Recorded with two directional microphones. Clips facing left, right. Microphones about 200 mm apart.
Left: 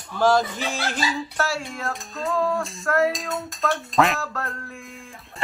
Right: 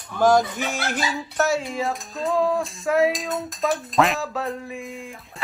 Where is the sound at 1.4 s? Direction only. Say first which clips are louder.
Right 7 dB; 20° right (ahead or behind).